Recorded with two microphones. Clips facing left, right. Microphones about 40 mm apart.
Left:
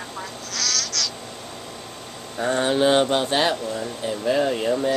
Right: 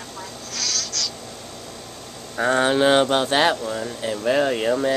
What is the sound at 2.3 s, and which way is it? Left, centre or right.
Speech, right.